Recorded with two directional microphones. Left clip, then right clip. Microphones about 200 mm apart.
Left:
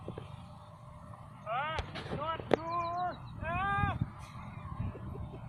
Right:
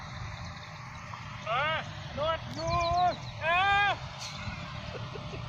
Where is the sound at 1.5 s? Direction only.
55° right (ahead or behind).